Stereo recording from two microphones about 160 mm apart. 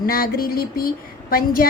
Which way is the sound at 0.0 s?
65° left (ahead or behind).